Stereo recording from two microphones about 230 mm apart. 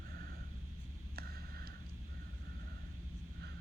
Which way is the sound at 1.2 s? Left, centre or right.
Right.